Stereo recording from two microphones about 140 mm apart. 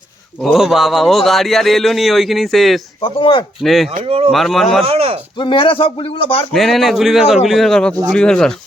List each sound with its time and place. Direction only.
0.4 s speech: centre (ahead or behind)
3.0 s speech: 40° left (ahead or behind)
3.6 s speech: centre (ahead or behind)
4.0 s speech: 40° right (ahead or behind)
4.3 s speech: centre (ahead or behind)
4.8 s speech: 45° right (ahead or behind)
5.4 s speech: 35° left (ahead or behind)
6.5 s speech: centre (ahead or behind)